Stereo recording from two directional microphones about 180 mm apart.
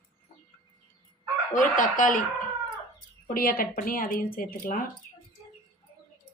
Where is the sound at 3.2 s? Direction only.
55° left (ahead or behind).